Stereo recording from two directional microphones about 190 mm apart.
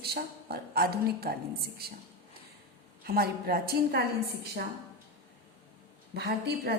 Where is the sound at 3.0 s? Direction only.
55° right (ahead or behind).